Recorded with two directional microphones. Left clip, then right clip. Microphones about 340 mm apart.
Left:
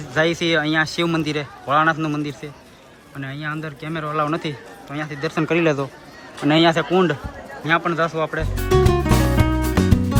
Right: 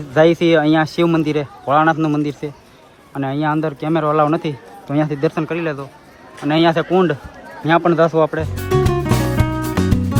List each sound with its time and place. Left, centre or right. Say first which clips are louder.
0.1 s a man's voice: right 6 dB; centre
7.6 s music: right 6 dB; centre